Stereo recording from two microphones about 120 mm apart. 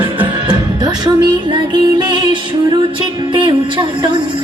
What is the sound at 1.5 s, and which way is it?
Music, 40° right (ahead or behind).